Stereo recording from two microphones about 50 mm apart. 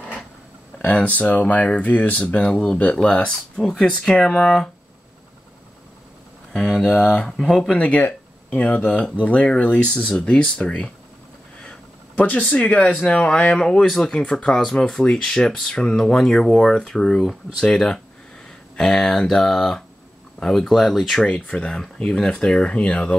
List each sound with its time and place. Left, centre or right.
0.8 s speech: left
3.1 s speech: centre
6.5 s a sound: centre
6.8 s speech: centre
7.1 s speech: centre
7.7 s speech: left
12.2 s speech: left; by 21.2 s centre
21.2 s speech: left